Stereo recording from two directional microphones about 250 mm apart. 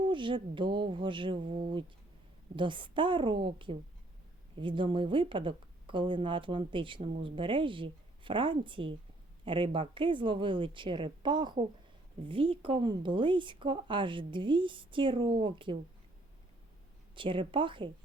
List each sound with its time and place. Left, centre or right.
0.0 s speech: centre
17.2 s speech: centre